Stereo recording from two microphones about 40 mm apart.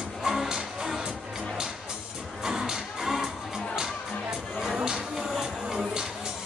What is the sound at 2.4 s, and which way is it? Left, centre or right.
Music, centre.